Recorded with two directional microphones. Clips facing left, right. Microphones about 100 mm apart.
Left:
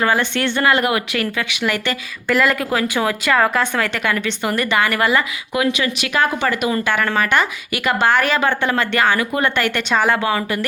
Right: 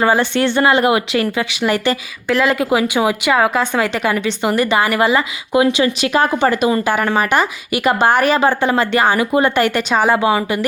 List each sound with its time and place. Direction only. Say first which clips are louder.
0.0 s a woman's voice: right 4 dB; 30° right (ahead or behind)
3.8 s a woman's voice: right 3 dB; 30° right (ahead or behind)